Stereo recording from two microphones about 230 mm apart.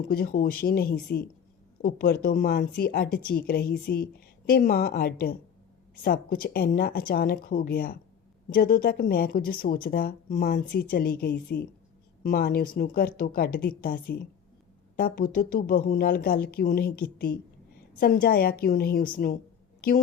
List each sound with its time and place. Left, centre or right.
0.1 s a woman's voice: left